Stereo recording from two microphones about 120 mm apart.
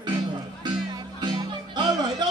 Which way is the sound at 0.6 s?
40° right (ahead or behind).